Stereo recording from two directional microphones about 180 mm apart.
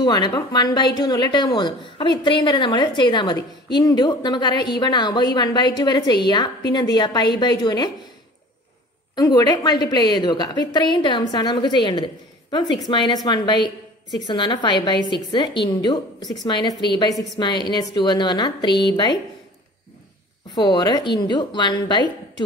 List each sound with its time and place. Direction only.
0.0 s a woman's voice: 25° left (ahead or behind)
9.1 s a woman's voice: 20° left (ahead or behind)
20.5 s a woman's voice: 25° left (ahead or behind)